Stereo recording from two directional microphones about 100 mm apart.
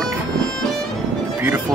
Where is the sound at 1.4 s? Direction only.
20° right (ahead or behind).